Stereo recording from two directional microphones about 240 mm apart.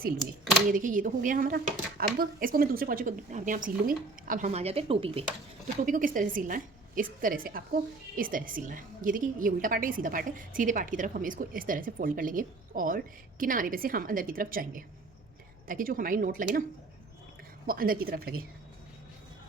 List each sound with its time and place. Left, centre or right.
0.7 s a woman's voice: right
17.7 s a woman's voice: right